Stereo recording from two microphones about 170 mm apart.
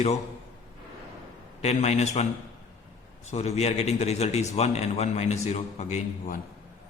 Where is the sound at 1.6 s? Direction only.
40° left (ahead or behind).